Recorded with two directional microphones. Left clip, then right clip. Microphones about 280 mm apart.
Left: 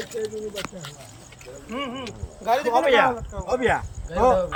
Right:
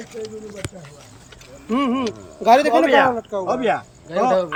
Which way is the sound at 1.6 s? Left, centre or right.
Right.